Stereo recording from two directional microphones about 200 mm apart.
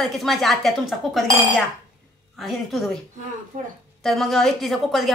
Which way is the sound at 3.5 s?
40° right (ahead or behind).